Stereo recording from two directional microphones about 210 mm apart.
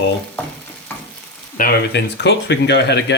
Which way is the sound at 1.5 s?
50° left (ahead or behind).